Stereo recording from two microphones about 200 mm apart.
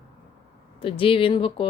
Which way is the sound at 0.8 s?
25° left (ahead or behind).